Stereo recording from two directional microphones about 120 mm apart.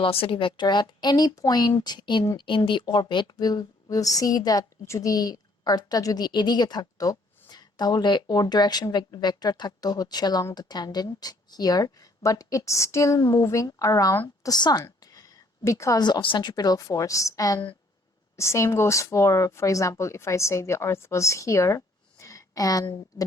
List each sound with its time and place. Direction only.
0.0 s a woman's voice: 50° left (ahead or behind); by 23.2 s 30° left (ahead or behind)